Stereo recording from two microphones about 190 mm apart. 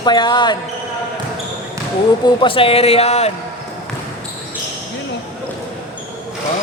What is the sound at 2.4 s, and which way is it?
Speech, 30° left (ahead or behind).